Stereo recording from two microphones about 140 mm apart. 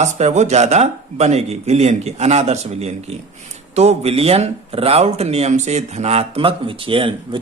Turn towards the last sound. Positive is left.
turn(degrees=-40)  # may be behind; listen again after turning